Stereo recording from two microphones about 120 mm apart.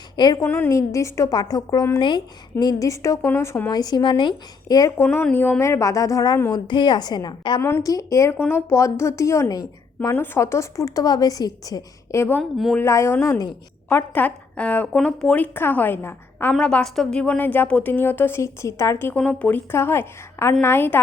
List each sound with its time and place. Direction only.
0.2 s a woman's voice: 35° left (ahead or behind)
0.4 s a woman's voice: 15° left (ahead or behind)
0.7 s a woman's voice: 25° left (ahead or behind)
5.2 s a woman's voice: 15° left (ahead or behind)
6.5 s a woman's voice: 40° left (ahead or behind)
7.6 s a woman's voice: 25° left (ahead or behind)
12.4 s speech: centre (ahead or behind)
12.8 s a woman's voice: 20° left (ahead or behind)